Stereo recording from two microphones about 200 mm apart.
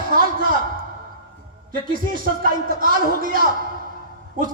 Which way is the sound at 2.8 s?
45° right (ahead or behind).